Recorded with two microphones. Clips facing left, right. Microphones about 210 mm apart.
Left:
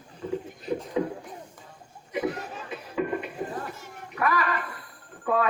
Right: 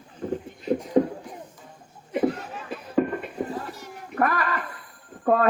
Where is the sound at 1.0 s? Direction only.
50° right (ahead or behind).